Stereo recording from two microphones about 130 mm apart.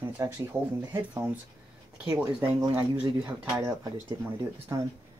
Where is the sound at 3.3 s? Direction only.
20° right (ahead or behind).